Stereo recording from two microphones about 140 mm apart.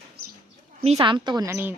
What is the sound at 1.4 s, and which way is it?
Speech, 20° right (ahead or behind).